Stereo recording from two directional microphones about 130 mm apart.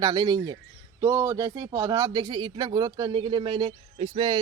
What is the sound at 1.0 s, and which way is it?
Speech, 25° right (ahead or behind).